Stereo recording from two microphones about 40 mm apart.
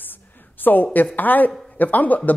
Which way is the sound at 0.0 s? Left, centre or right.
Left.